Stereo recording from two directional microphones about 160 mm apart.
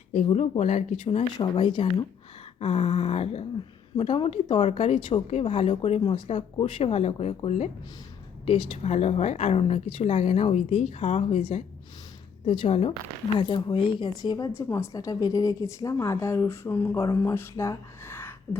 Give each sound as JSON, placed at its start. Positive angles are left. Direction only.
{"t": 0.3, "sound": "speech", "side_deg": 45}
{"t": 1.4, "sound": "a woman's voice", "side_deg": 30}